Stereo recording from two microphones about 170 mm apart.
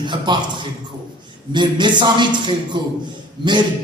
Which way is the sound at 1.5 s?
25° right (ahead or behind).